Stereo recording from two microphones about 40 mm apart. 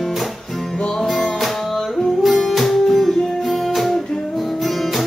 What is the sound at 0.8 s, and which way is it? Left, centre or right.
Music, centre.